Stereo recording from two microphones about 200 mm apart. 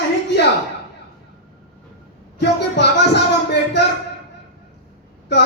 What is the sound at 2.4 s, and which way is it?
Speech, 60° left (ahead or behind).